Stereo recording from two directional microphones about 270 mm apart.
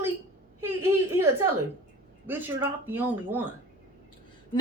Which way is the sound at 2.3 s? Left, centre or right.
Centre.